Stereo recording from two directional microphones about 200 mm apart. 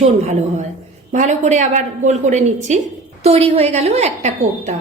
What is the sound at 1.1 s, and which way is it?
A woman's voice, 35° right (ahead or behind).